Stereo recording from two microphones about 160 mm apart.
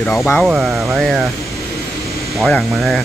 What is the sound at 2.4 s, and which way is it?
Speech, centre (ahead or behind).